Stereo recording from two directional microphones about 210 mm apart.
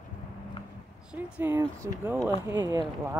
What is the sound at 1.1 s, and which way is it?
Speech, 10° right (ahead or behind).